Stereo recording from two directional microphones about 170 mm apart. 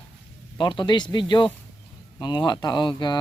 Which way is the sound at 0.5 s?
25° left (ahead or behind).